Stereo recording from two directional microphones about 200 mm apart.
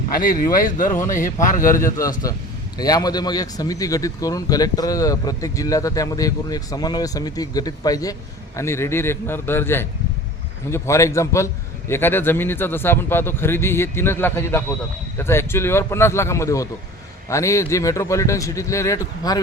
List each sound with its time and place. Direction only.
0.1 s speech: 45° left (ahead or behind)
1.7 s speech: 15° left (ahead or behind)